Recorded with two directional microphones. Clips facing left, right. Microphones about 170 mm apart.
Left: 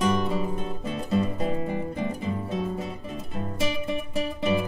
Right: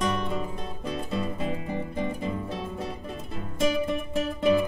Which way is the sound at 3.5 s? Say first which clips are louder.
Right 4 dB; 5° left (ahead or behind).